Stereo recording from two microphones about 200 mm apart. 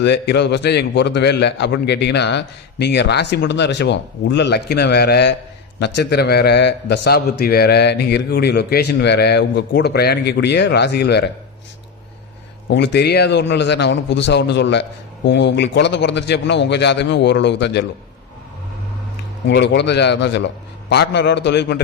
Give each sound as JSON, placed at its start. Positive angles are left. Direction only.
{"t": 0.0, "sound": "a man's voice", "side_deg": 60}
{"t": 12.6, "sound": "a man's voice", "side_deg": 60}
{"t": 19.5, "sound": "a man's voice", "side_deg": 60}